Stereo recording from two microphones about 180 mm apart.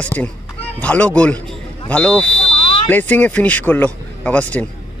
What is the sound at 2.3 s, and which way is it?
Smoke detector, 35° left (ahead or behind).